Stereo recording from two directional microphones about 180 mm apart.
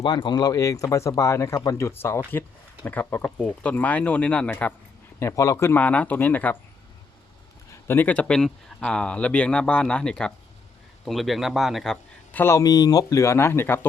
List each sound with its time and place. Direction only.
0.0 s a man's voice: 25° left (ahead or behind)
7.7 s a man's voice: 10° left (ahead or behind)